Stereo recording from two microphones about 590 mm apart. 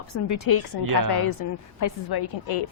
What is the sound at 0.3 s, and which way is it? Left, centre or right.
A woman's voice, left.